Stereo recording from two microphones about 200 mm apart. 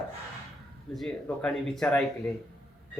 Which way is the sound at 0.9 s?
Centre (ahead or behind).